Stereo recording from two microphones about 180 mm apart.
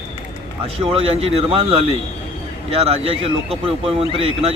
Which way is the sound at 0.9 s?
35° right (ahead or behind).